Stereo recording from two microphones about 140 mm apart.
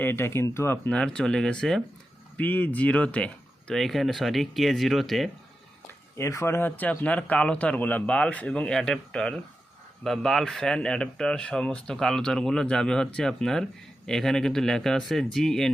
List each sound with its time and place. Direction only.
0.0 s speech: 15° left (ahead or behind)
0.9 s speech: 5° left (ahead or behind)
6.1 s speech: 20° left (ahead or behind); by 15.7 s 5° left (ahead or behind)